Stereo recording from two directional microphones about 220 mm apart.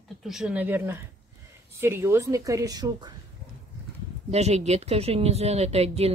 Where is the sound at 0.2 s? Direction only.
Centre (ahead or behind); by 3.1 s 15° right (ahead or behind).